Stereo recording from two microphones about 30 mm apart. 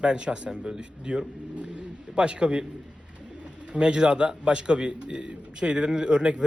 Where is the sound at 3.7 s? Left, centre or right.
Right.